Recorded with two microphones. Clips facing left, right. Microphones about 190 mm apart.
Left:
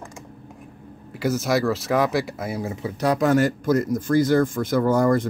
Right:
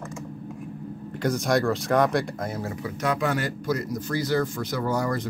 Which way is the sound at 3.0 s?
40° left (ahead or behind).